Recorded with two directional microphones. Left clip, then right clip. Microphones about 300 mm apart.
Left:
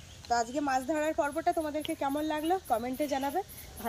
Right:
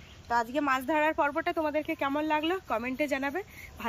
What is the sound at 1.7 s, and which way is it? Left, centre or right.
Speech, right.